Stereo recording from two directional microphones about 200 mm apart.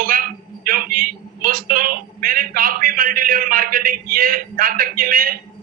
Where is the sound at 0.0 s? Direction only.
45° right (ahead or behind).